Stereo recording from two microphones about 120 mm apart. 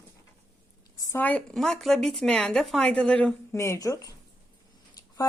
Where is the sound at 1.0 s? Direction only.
25° left (ahead or behind).